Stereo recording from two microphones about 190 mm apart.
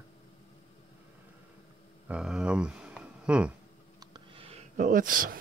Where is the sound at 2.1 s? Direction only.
5° right (ahead or behind).